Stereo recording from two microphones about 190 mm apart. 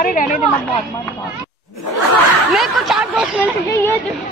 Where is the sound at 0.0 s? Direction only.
45° left (ahead or behind).